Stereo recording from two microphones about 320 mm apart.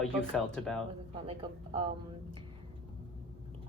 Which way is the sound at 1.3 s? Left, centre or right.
Centre.